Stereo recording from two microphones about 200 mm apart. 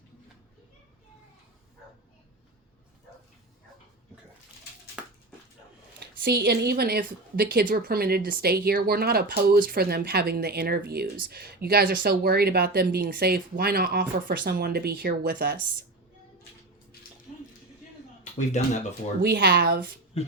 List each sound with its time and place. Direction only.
5.0 s a sound: 5° right (ahead or behind)
6.0 s speech: 50° right (ahead or behind)
18.3 s speech: 35° left (ahead or behind)
19.2 s speech: 50° right (ahead or behind)